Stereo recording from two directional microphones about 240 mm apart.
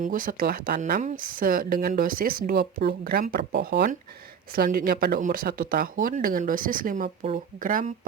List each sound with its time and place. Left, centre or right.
0.0 s speech: right